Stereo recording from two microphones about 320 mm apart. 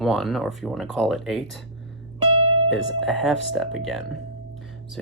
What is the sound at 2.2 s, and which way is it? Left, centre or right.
Music, centre.